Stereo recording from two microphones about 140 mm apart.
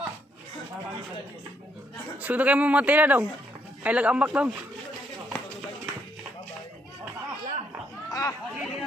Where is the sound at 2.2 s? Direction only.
10° right (ahead or behind).